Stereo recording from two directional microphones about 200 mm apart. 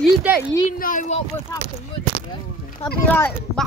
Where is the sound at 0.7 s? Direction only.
40° left (ahead or behind).